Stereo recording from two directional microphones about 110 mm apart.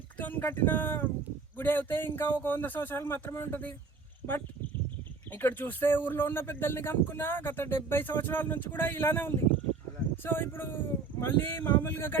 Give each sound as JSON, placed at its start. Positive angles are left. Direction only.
{"t": 0.2, "sound": "speech", "side_deg": 15}
{"t": 5.3, "sound": "speech", "side_deg": 20}